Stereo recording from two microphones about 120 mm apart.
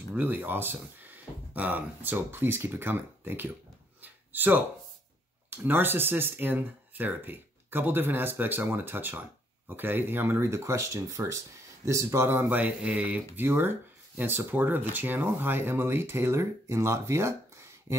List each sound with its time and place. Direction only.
0.1 s speech: 15° right (ahead or behind)
4.0 s a sound: 15° right (ahead or behind)
5.5 s speech: 15° right (ahead or behind)